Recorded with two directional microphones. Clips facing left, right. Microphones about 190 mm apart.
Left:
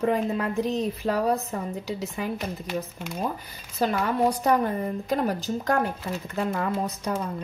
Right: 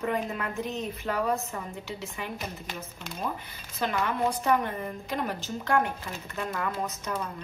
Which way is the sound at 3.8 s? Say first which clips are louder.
Left 5 dB; 40° left (ahead or behind).